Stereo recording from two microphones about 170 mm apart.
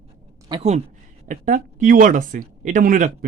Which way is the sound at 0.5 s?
25° right (ahead or behind).